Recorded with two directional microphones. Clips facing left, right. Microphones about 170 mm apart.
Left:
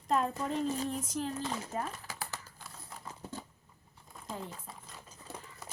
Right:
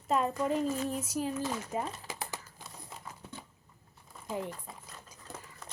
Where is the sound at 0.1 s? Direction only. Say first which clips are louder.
Right 2 dB; 5° right (ahead or behind).